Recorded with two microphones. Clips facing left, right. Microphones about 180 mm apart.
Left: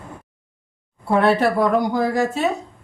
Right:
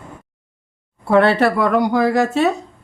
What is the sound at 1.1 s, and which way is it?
Speech, 75° right (ahead or behind).